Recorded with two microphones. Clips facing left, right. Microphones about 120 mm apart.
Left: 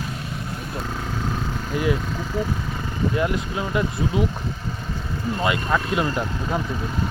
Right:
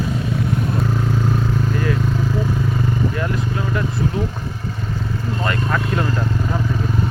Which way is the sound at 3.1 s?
20° left (ahead or behind).